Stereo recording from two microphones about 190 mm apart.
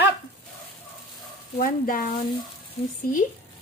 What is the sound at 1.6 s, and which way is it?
Frying, 50° left (ahead or behind).